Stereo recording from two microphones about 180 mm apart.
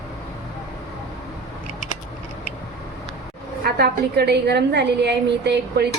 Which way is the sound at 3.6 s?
65° right (ahead or behind).